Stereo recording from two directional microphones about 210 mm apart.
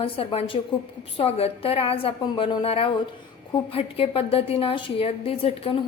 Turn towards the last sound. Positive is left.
turn(degrees=25)  # may be behind; listen again after turning